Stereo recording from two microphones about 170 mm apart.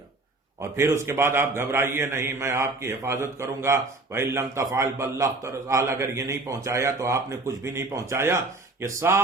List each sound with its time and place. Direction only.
0.8 s a man's voice: 15° right (ahead or behind)